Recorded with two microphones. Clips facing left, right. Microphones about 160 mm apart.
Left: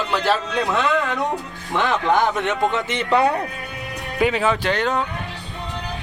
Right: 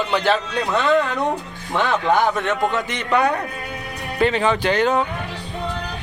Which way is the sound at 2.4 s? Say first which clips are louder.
Even; 20° left (ahead or behind).